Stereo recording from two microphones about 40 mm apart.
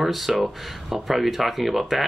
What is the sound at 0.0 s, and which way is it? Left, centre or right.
Speech, centre.